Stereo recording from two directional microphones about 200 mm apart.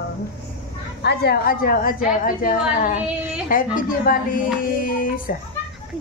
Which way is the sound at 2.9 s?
5° right (ahead or behind).